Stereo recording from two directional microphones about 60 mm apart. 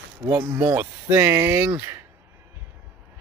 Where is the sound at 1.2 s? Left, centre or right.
Right.